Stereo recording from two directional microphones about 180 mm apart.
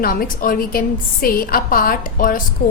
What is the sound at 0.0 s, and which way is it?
A woman's voice, 55° left (ahead or behind).